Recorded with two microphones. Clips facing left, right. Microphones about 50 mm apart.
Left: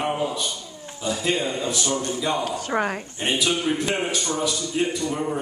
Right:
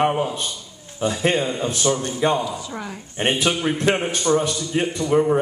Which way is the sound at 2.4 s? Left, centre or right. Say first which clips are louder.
Left 5 dB; left.